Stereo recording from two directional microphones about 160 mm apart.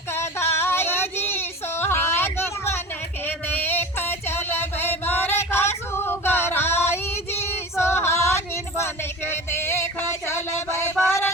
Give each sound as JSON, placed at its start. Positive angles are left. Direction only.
{"t": 0.1, "sound": "female singing", "side_deg": 15}
{"t": 3.2, "sound": "a sound", "side_deg": 10}
{"t": 5.9, "sound": "female singing", "side_deg": 15}
{"t": 11.0, "sound": "music", "side_deg": 15}